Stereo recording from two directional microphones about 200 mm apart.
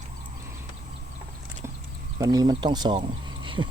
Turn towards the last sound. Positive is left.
turn(degrees=-25)  # may be behind; listen again after turning